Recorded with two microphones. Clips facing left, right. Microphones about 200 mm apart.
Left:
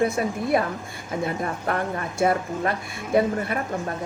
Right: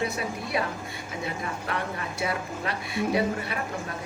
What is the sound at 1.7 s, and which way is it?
A woman's voice, 50° left (ahead or behind).